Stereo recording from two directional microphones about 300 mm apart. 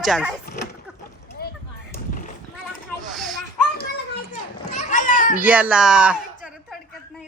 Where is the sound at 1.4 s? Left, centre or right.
Left.